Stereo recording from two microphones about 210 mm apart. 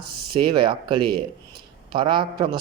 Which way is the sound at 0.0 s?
45° right (ahead or behind).